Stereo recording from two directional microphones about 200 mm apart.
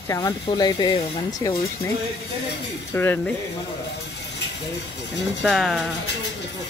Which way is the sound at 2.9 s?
10° left (ahead or behind).